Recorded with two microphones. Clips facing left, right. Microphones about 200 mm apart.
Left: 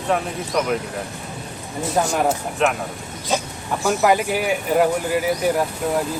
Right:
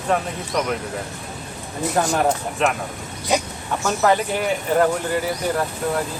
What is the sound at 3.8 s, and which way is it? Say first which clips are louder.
Speech: left 1 dB; 10° left (ahead or behind).